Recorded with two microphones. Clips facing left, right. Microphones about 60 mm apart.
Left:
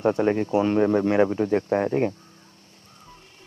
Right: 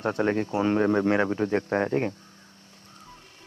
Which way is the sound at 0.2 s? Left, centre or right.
Centre.